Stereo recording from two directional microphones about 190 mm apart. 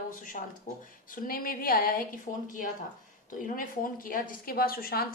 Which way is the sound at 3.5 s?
45° left (ahead or behind).